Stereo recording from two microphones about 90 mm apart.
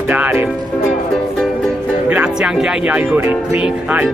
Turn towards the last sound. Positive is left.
turn(degrees=-15)  # may be behind; listen again after turning